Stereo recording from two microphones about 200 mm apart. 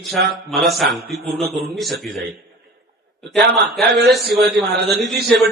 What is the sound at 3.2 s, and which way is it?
Speech, centre (ahead or behind).